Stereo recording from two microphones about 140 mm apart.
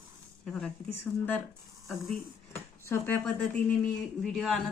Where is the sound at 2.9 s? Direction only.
15° left (ahead or behind).